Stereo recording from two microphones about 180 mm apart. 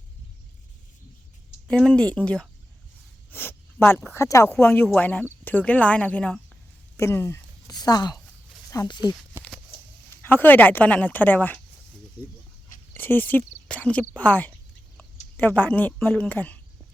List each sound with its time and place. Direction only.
1.6 s speech: 5° left (ahead or behind); by 9.0 s 20° left (ahead or behind)
10.2 s speech: 10° left (ahead or behind)
12.9 s speech: 10° left (ahead or behind)